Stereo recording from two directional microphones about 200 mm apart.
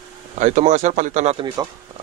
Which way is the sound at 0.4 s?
35° right (ahead or behind).